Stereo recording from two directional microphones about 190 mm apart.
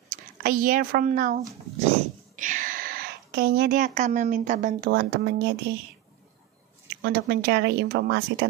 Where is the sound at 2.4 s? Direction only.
45° right (ahead or behind).